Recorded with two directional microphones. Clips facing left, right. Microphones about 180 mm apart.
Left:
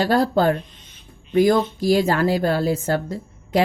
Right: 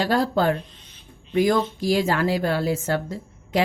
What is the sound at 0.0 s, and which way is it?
Speech, 40° left (ahead or behind).